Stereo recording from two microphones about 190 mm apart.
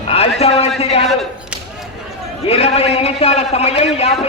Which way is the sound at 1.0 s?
Centre (ahead or behind).